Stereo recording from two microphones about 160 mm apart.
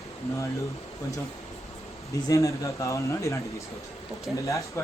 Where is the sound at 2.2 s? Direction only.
20° left (ahead or behind).